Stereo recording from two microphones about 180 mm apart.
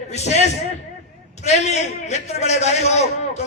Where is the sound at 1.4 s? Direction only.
40° left (ahead or behind).